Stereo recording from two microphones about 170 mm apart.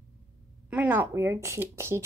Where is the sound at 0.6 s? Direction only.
10° right (ahead or behind).